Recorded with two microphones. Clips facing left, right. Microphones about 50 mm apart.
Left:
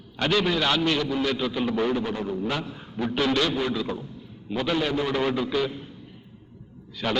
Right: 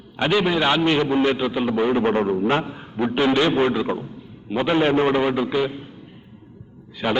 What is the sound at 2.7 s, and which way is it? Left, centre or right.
A man's voice, right.